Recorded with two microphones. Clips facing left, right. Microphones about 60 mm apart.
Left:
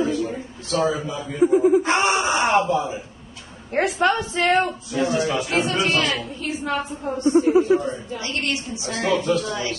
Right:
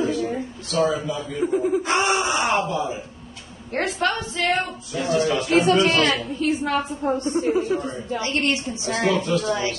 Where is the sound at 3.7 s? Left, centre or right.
Centre.